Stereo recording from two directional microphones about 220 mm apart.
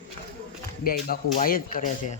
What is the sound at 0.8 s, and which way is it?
Speech, 40° left (ahead or behind).